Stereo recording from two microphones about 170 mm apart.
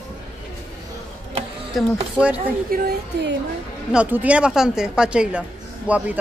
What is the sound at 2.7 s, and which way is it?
Speech, 80° right.